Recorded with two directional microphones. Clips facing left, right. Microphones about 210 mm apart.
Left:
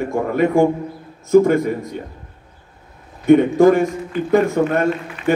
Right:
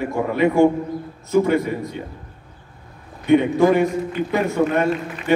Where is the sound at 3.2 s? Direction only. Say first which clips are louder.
Left 4 dB; 45° left (ahead or behind).